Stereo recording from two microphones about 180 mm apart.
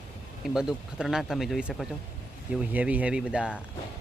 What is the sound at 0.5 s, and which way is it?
Speech, 5° right (ahead or behind).